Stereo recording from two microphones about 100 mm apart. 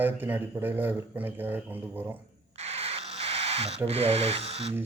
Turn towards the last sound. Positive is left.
turn(degrees=-80)